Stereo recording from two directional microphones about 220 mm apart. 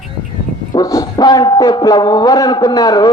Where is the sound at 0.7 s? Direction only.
15° left (ahead or behind).